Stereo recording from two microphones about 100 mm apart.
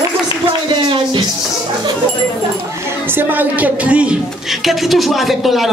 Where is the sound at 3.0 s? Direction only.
20° right (ahead or behind).